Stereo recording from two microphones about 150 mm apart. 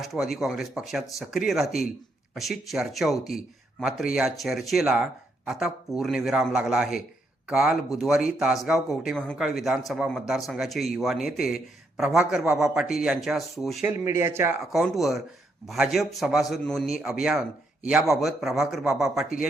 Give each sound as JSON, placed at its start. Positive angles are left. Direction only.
{"t": 0.0, "sound": "speech", "side_deg": 0}
{"t": 14.0, "sound": "speech", "side_deg": -15}
{"t": 14.7, "sound": "speech", "side_deg": 0}